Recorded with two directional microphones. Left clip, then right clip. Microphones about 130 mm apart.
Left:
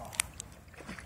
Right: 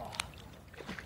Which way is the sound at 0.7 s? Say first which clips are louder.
Right 1 dB; 50° right (ahead or behind).